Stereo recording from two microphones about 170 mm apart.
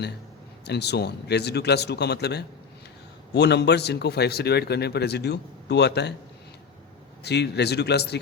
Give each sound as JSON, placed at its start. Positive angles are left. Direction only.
{"t": 0.6, "sound": "speech", "side_deg": 75}
{"t": 7.3, "sound": "speech", "side_deg": 80}